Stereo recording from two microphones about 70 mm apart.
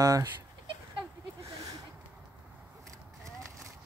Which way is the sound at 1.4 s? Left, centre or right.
Right.